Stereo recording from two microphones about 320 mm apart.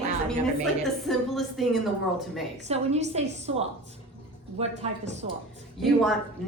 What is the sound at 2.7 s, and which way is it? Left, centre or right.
A woman's voice, centre.